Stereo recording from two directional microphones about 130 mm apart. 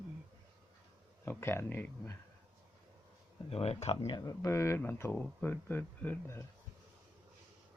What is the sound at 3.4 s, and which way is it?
Speech, 50° left (ahead or behind).